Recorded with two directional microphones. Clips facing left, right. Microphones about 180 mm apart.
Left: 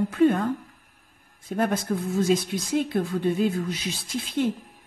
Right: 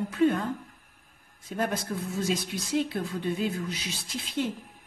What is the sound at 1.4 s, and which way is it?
A man's voice, 55° left (ahead or behind).